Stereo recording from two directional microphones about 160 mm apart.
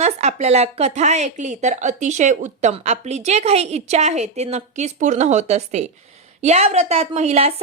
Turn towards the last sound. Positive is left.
turn(degrees=-40)  # may be behind; listen again after turning